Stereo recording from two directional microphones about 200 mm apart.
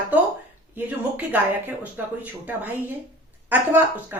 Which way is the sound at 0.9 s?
10° right (ahead or behind).